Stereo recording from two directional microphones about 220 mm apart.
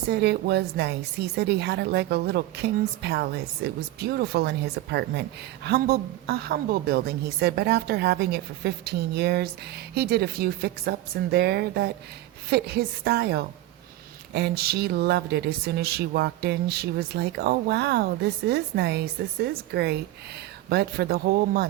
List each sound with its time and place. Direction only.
0.1 s a woman's voice: 50° right (ahead or behind)